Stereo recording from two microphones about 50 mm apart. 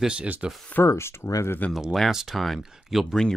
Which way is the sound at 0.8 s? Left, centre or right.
Left.